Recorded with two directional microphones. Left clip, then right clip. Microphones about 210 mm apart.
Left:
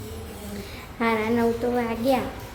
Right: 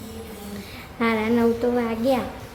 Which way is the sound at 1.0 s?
10° right (ahead or behind).